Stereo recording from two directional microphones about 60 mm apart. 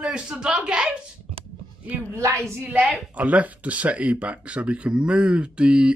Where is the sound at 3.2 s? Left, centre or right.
Right.